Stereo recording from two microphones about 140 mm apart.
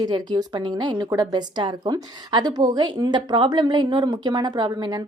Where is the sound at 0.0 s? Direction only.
30° right (ahead or behind).